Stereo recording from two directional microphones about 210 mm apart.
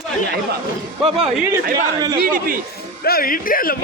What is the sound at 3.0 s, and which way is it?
Speech, 45° left (ahead or behind).